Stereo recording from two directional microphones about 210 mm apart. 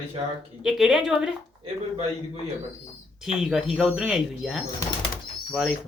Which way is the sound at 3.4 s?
Centre (ahead or behind).